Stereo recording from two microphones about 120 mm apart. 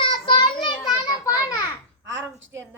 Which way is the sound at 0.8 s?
30° left (ahead or behind).